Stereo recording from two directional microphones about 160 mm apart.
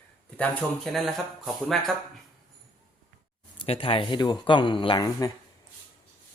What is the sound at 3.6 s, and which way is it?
Speech, 35° left (ahead or behind).